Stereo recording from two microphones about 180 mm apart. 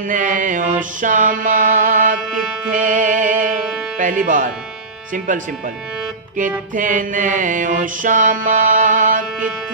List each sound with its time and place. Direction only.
0.1 s mantra: 45° right (ahead or behind)
2.7 s music: 45° right (ahead or behind)
4.0 s mantra: 45° right (ahead or behind)
6.7 s mantra: 45° right (ahead or behind)